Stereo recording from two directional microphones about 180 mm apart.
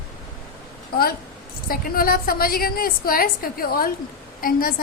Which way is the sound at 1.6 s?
55° left (ahead or behind).